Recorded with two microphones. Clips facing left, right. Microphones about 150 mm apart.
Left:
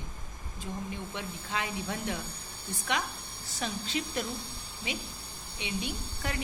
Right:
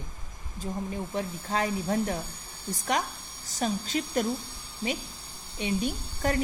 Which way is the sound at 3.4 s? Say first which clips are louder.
Right 6 dB; 40° right (ahead or behind).